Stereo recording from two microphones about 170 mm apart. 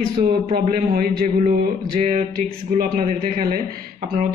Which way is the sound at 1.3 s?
50° right (ahead or behind).